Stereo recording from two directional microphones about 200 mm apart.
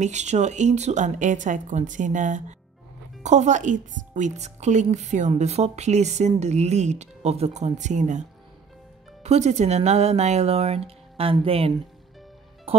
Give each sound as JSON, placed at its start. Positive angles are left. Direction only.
{"t": 0.0, "sound": "a woman's voice", "side_deg": -35}